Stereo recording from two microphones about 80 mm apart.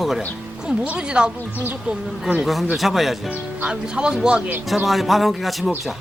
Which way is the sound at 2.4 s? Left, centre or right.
Centre.